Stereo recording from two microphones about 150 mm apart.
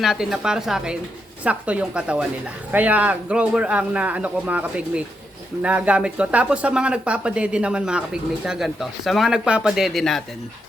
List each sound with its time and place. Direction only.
0.0 s a woman's voice: 5° right (ahead or behind)